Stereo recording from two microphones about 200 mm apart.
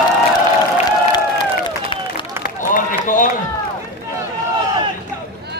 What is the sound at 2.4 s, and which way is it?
Run, 40° left (ahead or behind).